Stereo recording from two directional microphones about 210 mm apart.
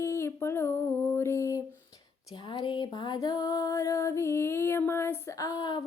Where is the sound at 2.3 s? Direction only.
25° left (ahead or behind).